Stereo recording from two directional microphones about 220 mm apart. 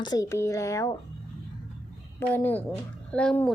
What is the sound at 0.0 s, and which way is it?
Speech, 15° left (ahead or behind).